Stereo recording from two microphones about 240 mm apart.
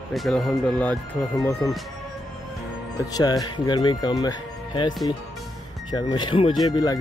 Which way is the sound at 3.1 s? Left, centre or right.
Centre.